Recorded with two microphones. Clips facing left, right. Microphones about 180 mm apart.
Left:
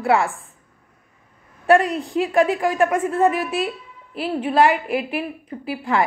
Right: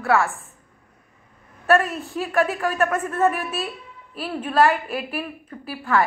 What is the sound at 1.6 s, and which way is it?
A woman's voice, 15° left (ahead or behind).